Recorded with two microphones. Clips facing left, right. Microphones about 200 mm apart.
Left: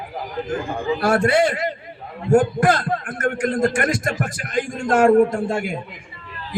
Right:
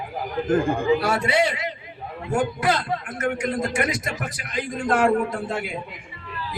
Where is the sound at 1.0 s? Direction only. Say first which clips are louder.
Left 5 dB; 50° left (ahead or behind).